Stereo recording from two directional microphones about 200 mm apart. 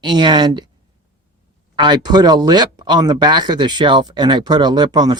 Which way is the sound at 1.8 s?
20° right (ahead or behind).